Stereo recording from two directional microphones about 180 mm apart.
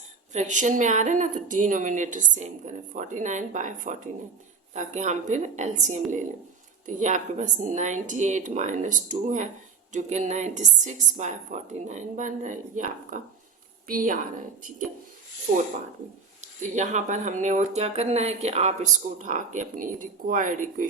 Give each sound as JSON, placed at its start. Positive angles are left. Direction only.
{"t": 0.3, "sound": "a woman's voice", "side_deg": -45}
{"t": 16.4, "sound": "speech", "side_deg": -40}